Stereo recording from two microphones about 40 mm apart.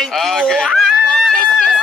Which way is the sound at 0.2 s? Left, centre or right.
Centre.